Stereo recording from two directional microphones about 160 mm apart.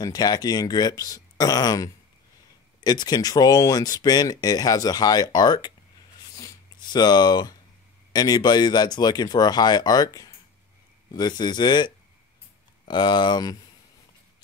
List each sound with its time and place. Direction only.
0.0 s speech: 25° left (ahead or behind)
6.3 s a sound: 25° left (ahead or behind)
8.1 s speech: 25° left (ahead or behind)